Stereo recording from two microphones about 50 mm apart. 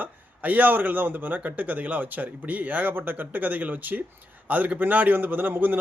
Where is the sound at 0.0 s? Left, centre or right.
Right.